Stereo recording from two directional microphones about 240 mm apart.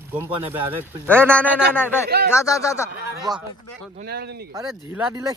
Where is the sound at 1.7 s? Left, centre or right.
Centre.